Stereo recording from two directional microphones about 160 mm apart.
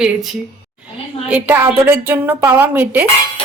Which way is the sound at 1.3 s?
15° right (ahead or behind).